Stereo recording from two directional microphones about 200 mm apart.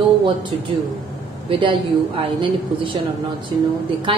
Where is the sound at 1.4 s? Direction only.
25° right (ahead or behind).